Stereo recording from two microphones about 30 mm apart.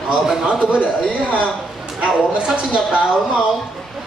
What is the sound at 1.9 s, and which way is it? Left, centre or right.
A woman's voice, right.